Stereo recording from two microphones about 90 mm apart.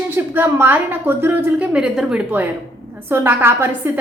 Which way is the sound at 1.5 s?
10° right (ahead or behind).